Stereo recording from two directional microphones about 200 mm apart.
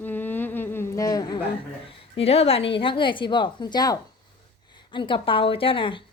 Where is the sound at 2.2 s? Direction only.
30° left (ahead or behind).